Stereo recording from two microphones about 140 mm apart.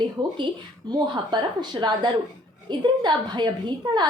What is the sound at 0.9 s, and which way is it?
A woman's voice, 30° right (ahead or behind).